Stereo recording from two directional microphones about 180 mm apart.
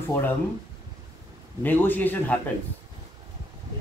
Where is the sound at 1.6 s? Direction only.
10° left (ahead or behind).